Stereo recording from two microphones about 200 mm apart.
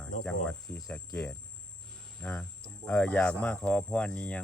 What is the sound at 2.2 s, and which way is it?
Cricket, 5° left (ahead or behind).